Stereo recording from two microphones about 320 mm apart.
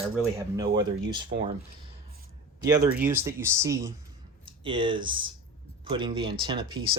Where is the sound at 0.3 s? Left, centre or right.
Centre.